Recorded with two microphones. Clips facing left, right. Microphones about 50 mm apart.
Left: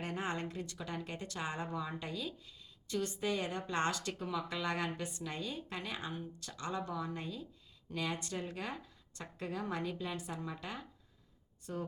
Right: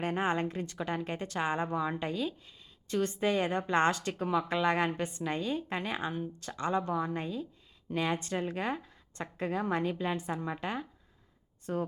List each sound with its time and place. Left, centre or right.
0.0 s a woman's voice: right
11.7 s speech: right